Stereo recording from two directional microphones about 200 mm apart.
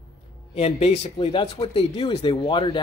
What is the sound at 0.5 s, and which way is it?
Speech, 30° left (ahead or behind).